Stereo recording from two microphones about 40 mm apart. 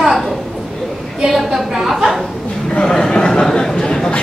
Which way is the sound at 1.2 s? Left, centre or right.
Centre.